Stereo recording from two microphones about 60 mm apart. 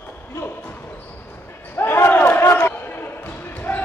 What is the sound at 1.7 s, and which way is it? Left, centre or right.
Basketball bounce, left.